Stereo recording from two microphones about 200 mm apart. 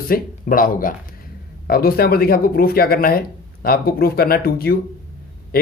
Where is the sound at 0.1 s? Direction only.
45° left (ahead or behind).